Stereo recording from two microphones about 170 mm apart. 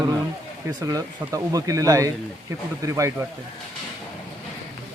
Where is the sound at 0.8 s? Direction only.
20° right (ahead or behind).